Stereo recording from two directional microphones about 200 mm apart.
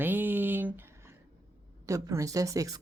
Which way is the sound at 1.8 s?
15° right (ahead or behind).